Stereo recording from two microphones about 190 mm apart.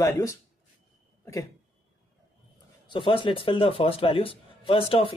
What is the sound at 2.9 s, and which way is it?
A man's voice, 25° left (ahead or behind).